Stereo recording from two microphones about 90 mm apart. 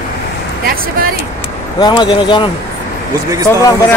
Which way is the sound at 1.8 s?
50° left (ahead or behind).